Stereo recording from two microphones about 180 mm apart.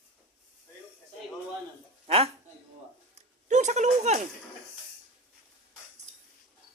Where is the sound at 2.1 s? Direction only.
35° right (ahead or behind).